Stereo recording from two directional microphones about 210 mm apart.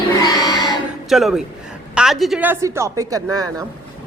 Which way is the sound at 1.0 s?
Centre (ahead or behind).